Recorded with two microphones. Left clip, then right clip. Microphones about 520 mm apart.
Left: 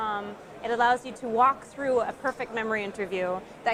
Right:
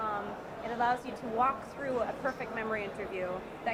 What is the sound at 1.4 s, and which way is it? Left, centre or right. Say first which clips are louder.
A woman's voice: left 8 dB; left.